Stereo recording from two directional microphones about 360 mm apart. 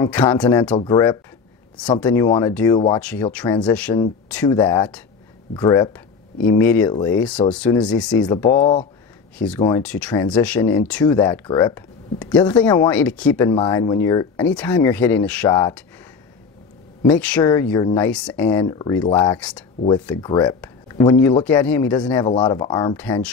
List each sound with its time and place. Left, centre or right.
0.0 s speech: centre
8.5 s speech: centre
9.4 s speech: centre
17.0 s speech: centre